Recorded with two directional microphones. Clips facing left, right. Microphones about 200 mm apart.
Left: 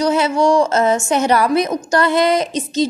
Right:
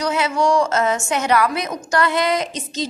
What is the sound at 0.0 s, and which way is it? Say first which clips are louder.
A woman's voice: left 4 dB; 30° left (ahead or behind).